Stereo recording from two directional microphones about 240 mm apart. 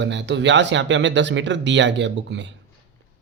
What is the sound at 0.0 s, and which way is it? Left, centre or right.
Speech, right.